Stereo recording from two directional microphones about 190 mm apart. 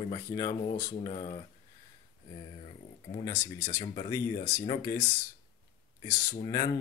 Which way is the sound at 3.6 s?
25° left (ahead or behind).